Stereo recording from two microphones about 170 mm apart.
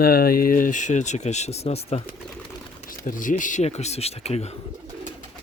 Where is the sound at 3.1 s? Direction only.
50° left (ahead or behind).